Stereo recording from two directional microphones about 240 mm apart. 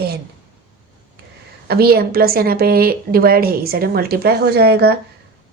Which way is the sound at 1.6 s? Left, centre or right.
Right.